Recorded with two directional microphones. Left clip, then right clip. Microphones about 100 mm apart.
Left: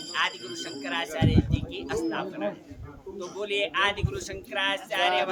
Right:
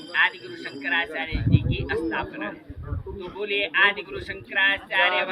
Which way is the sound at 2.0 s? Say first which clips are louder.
Right 1 dB; 40° left (ahead or behind).